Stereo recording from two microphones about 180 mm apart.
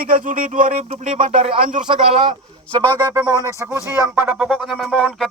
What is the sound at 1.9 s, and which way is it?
Speech, 30° right (ahead or behind).